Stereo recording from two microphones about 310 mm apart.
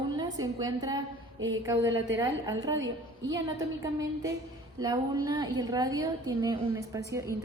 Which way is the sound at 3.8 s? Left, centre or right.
Centre.